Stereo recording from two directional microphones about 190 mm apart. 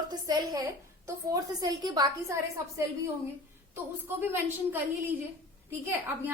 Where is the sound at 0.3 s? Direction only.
20° right (ahead or behind).